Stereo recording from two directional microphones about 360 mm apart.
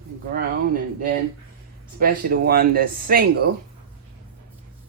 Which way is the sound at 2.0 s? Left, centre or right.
Right.